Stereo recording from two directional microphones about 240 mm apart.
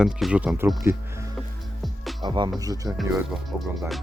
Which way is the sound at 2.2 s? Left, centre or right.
Centre.